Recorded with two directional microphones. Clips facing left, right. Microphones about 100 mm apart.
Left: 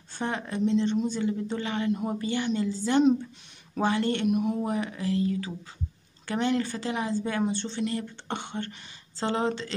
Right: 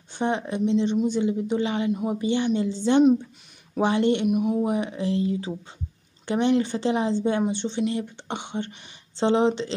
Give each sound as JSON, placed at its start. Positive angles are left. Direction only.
{"t": 0.1, "sound": "a woman's voice", "side_deg": -20}
{"t": 4.3, "sound": "a woman's voice", "side_deg": -10}
{"t": 4.7, "sound": "speech", "side_deg": -20}